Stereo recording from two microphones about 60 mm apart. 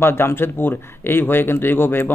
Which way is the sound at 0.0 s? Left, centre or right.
Left.